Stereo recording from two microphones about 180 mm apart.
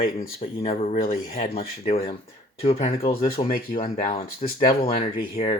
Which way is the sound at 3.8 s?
45° left (ahead or behind).